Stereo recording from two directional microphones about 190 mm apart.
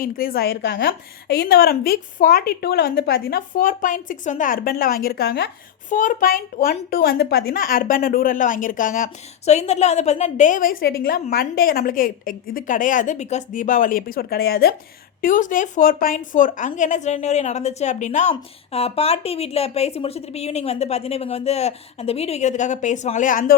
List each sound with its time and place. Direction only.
0.0 s a woman's voice: 50° left (ahead or behind)
5.9 s a woman's voice: 45° left (ahead or behind)
15.2 s a woman's voice: 45° left (ahead or behind)